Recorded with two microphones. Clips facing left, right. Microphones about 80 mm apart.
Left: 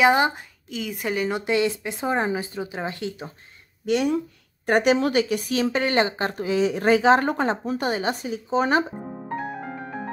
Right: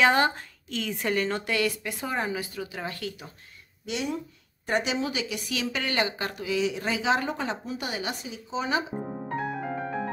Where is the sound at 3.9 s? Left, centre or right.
Left.